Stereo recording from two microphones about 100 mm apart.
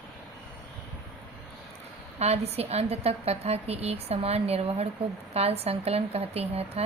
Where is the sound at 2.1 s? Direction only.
90° right.